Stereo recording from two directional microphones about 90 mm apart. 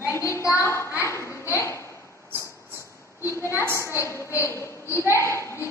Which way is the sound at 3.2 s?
30° left (ahead or behind).